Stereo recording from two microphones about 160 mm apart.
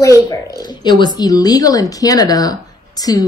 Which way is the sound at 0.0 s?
20° left (ahead or behind).